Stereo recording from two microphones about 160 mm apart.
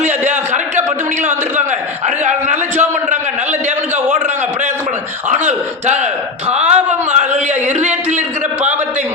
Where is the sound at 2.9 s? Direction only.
45° right (ahead or behind).